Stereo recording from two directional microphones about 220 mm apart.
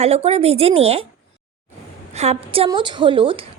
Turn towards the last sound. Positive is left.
turn(degrees=-25)  # may be behind; listen again after turning